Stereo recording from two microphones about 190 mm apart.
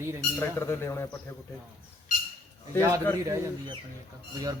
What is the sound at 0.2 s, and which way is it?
Speech, 15° left (ahead or behind).